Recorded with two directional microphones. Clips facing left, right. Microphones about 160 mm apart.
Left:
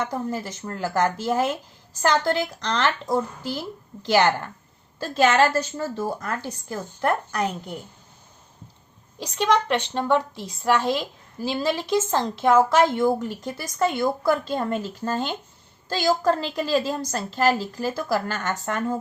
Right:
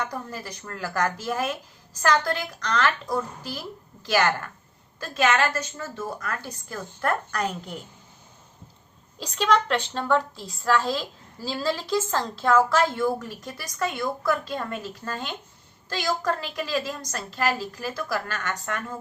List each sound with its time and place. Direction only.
0.0 s a woman's voice: 25° left (ahead or behind)
9.1 s a woman's voice: 15° left (ahead or behind); by 18.9 s 30° left (ahead or behind)